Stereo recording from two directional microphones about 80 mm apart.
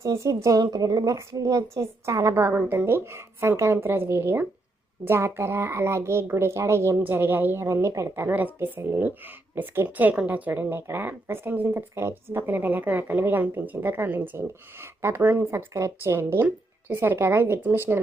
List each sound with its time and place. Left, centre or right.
0.0 s a woman's voice: right
1.1 s speech: right
2.5 s a woman's voice: right